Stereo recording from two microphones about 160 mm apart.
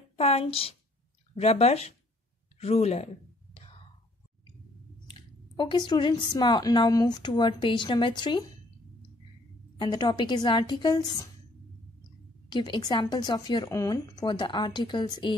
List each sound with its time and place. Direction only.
0.1 s a woman's voice: 40° left (ahead or behind)
5.6 s a woman's voice: 30° left (ahead or behind)
9.8 s a woman's voice: 25° left (ahead or behind)
12.4 s a woman's voice: 30° left (ahead or behind)